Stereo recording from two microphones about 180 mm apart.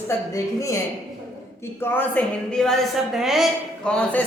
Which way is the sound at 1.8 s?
10° left (ahead or behind).